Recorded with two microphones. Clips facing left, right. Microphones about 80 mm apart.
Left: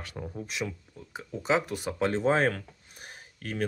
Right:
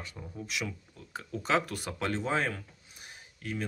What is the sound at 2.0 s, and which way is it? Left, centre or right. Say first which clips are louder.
Speech: left 6 dB; left.